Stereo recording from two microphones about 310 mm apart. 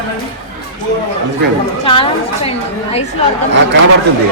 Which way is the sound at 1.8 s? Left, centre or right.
Centre.